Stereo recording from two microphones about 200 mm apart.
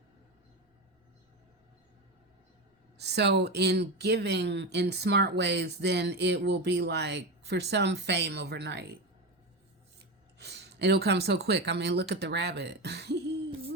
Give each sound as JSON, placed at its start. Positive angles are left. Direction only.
{"t": 3.0, "sound": "speech", "side_deg": -55}
{"t": 10.3, "sound": "speech", "side_deg": -55}